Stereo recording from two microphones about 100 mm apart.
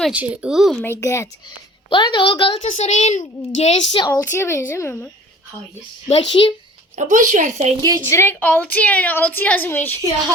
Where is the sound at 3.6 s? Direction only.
90° left.